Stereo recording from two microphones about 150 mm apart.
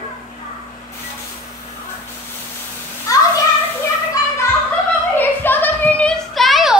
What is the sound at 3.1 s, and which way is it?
Children playing, 20° left (ahead or behind).